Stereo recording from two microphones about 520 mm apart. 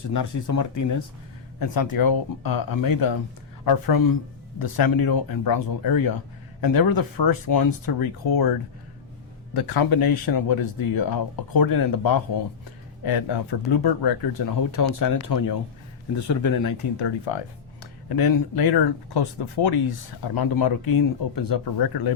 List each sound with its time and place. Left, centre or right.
0.0 s speech: left
9.6 s speech: left
17.0 s speech: left
18.1 s speech: left